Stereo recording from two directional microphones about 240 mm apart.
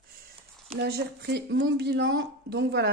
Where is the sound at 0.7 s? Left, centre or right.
Right.